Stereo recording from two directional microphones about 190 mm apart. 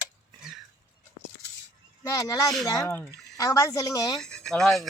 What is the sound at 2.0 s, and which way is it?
A woman's voice, 20° left (ahead or behind).